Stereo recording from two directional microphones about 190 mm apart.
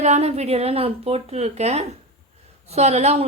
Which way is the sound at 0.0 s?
35° right (ahead or behind).